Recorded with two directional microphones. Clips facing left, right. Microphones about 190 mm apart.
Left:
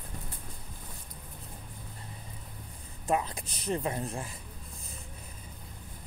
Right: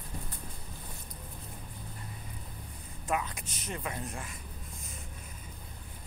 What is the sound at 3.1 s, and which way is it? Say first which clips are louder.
Speech: left 4 dB; 30° left (ahead or behind).